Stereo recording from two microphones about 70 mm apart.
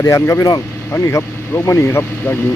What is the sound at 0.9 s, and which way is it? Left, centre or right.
Speech, left.